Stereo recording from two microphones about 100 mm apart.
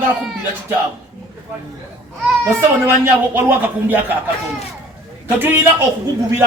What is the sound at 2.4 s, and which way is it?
A man's voice, 25° right (ahead or behind).